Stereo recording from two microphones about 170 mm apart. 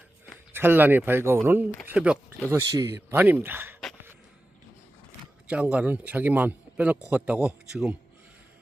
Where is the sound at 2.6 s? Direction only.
20° right (ahead or behind).